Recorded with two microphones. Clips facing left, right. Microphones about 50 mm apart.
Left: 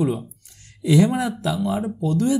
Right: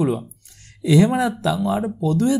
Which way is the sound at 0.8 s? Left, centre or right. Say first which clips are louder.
Right 2 dB; right.